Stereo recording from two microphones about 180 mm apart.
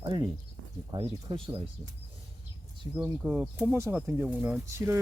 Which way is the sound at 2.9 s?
10° right (ahead or behind).